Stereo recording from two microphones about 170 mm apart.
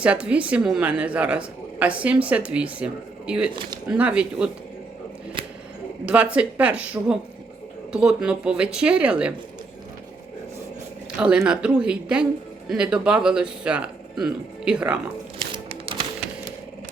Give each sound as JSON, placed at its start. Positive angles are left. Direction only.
{"t": 0.0, "sound": "a woman's voice", "side_deg": -5}
{"t": 6.3, "sound": "a woman's voice", "side_deg": -10}
{"t": 11.2, "sound": "a woman's voice", "side_deg": -5}
{"t": 15.5, "sound": "a sound", "side_deg": -35}